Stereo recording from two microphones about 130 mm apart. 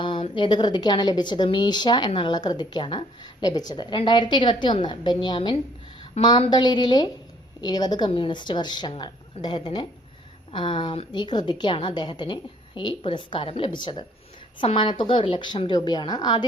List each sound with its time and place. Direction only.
0.0 s a woman's voice: 40° left (ahead or behind)
6.2 s a woman's voice: 55° left (ahead or behind)
6.5 s a woman's voice: 35° left (ahead or behind)